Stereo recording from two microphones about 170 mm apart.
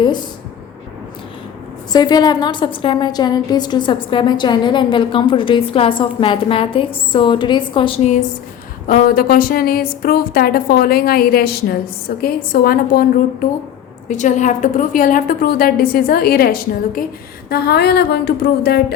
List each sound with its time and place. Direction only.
1.9 s a woman's voice: 25° left (ahead or behind)
8.9 s a woman's voice: 60° left (ahead or behind)
14.1 s a woman's voice: 45° left (ahead or behind); by 18.9 s 70° left (ahead or behind)